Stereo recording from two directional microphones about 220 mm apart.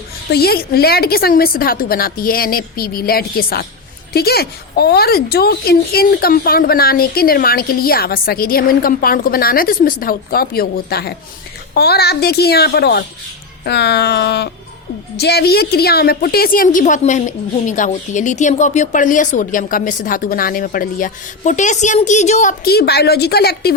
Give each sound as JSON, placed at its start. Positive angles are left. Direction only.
{"t": 0.3, "sound": "a woman's voice", "side_deg": 45}